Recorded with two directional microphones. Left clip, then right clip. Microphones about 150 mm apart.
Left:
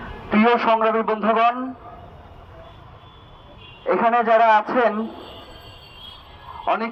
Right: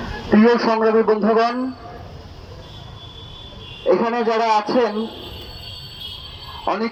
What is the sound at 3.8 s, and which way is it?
A man's voice, 30° right (ahead or behind).